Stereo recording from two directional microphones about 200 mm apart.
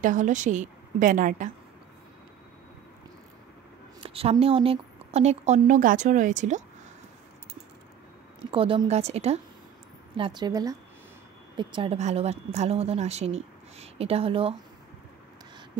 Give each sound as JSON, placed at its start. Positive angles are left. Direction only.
{"t": 0.0, "sound": "speech", "side_deg": -40}
{"t": 4.0, "sound": "speech", "side_deg": -30}
{"t": 8.5, "sound": "speech", "side_deg": -25}